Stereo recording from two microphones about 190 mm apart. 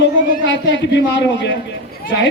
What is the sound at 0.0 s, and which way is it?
A man's voice, 70° left (ahead or behind).